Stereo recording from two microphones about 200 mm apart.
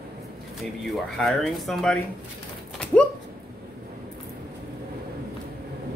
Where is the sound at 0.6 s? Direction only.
Centre (ahead or behind).